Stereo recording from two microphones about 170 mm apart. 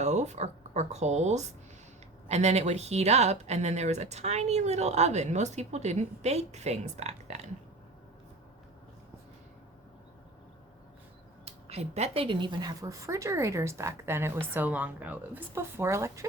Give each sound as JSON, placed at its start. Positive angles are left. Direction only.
{"t": 0.0, "sound": "speech", "side_deg": -40}
{"t": 11.4, "sound": "speech", "side_deg": -35}